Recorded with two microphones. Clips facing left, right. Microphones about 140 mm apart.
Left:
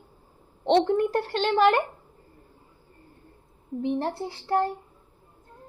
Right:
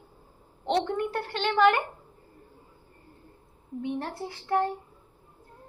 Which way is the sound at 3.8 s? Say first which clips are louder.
Left 5 dB; 30° left (ahead or behind).